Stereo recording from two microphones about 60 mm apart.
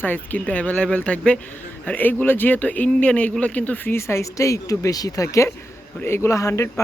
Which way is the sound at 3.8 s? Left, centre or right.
Left.